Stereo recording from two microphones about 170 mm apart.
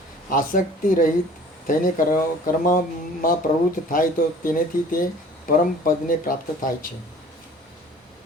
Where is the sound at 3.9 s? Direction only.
55° left (ahead or behind).